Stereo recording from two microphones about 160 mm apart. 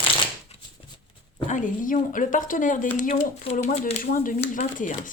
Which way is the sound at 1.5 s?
55° left (ahead or behind).